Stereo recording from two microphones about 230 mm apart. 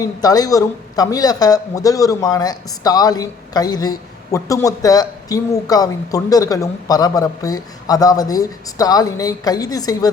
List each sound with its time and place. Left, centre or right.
0.0 s speech: centre